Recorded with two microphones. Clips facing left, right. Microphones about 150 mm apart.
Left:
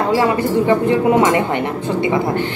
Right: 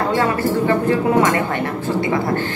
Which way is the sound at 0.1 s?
20° left (ahead or behind).